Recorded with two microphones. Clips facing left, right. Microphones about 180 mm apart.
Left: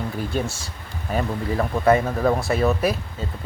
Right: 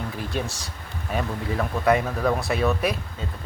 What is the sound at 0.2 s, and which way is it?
Speech, centre (ahead or behind).